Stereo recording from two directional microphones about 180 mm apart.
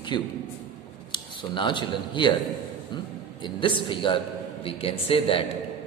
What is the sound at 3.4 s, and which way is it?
A man's voice, 25° left (ahead or behind).